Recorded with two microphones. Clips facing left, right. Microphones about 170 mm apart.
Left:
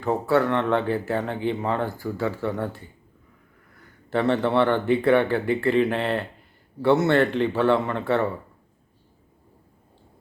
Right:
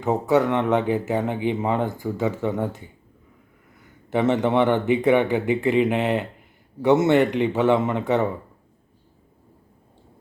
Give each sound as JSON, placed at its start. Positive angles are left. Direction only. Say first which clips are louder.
{"t": 0.0, "sound": "speech", "louder": "right 2 dB", "side_deg": -15}
{"t": 4.1, "sound": "speech", "louder": "right 1 dB", "side_deg": -20}